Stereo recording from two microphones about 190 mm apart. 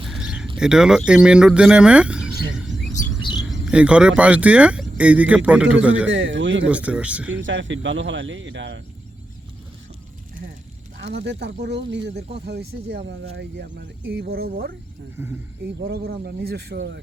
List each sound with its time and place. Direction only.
0.1 s speech: 5° right (ahead or behind)
2.6 s chirp: centre (ahead or behind)
3.2 s chirp: 25° left (ahead or behind)
3.5 s speech: 5° right (ahead or behind)
6.1 s speech: 75° right (ahead or behind)
6.7 s speech: 5° right (ahead or behind)
7.3 s speech: 80° right
10.9 s speech: 65° right (ahead or behind)